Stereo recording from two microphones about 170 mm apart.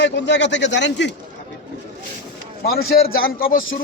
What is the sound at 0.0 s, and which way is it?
Speech, 90° left.